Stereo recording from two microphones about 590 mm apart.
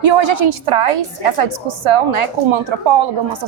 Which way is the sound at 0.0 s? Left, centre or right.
Right.